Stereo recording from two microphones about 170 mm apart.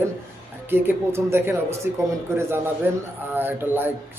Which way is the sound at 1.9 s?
50° left (ahead or behind).